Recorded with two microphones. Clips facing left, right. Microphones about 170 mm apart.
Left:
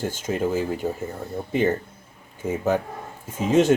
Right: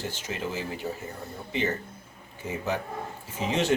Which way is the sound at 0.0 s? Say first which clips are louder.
Left 8 dB; 50° left (ahead or behind).